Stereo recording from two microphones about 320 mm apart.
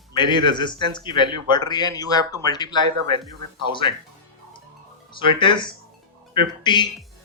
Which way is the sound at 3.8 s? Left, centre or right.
Centre.